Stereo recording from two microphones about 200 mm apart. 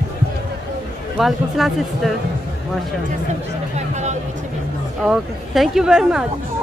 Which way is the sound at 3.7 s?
35° right (ahead or behind).